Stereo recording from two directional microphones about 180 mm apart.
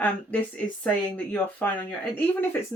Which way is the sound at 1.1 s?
5° left (ahead or behind).